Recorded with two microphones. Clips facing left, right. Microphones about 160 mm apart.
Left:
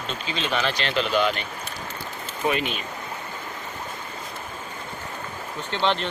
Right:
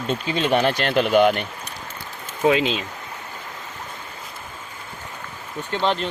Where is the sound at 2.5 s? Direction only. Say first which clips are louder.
Right 7 dB; 90° right.